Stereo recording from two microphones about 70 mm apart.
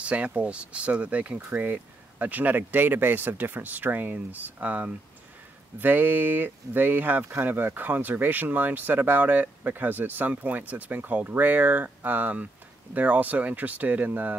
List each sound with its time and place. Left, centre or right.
0.0 s speech: centre